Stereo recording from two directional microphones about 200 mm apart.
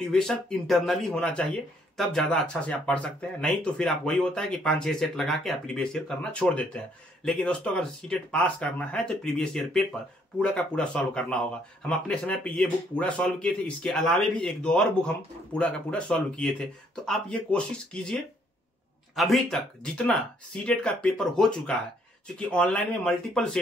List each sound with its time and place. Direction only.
0.1 s speech: 5° left (ahead or behind)